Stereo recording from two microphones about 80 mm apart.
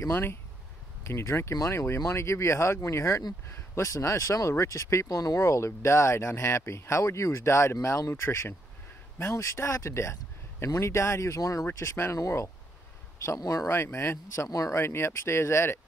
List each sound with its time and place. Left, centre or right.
0.1 s speech: left
5.0 s speech: left
5.4 s speech: left
11.6 s speech: left
13.7 s speech: left
14.5 s speech: left
14.8 s speech: left